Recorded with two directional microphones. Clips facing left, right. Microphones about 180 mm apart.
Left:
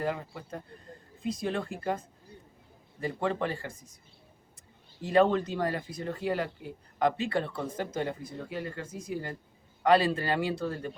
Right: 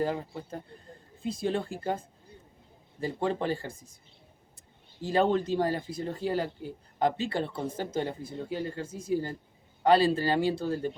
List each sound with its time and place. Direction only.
0.0 s speech: 30° right (ahead or behind)
5.0 s speech: 30° right (ahead or behind)